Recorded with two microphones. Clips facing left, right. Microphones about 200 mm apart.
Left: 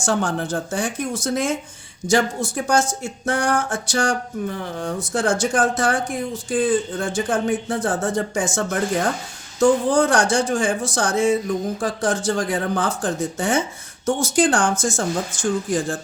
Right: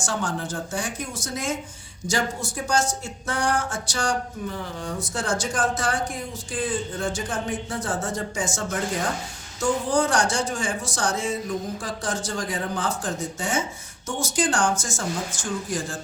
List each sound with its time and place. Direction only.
0.0 s speech: 55° left (ahead or behind)